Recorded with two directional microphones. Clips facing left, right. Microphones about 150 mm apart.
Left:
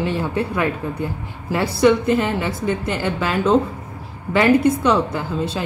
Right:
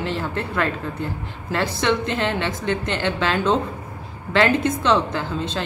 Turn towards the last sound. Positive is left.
turn(degrees=10)  # may be behind; listen again after turning